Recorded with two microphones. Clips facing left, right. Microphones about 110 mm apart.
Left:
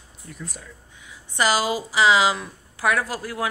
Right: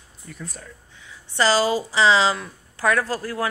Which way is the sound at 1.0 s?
15° left (ahead or behind).